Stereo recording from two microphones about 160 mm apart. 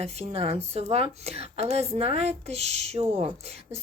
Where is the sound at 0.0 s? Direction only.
40° right (ahead or behind).